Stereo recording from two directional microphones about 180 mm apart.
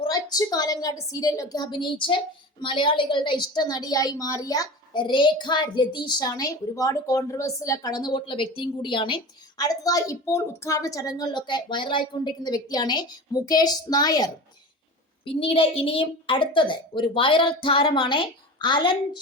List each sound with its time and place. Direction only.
0.0 s a woman's voice: 20° left (ahead or behind)